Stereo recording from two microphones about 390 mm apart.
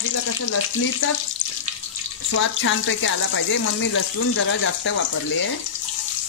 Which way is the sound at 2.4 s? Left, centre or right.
Left.